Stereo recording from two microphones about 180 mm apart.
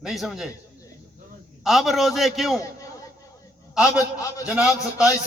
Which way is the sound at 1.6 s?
Centre (ahead or behind).